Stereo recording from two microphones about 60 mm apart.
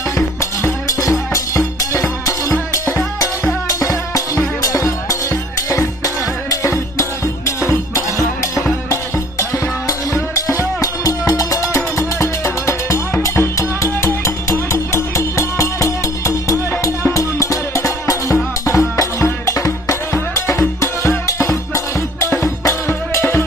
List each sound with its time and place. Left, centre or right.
0.4 s music: left
3.6 s music: left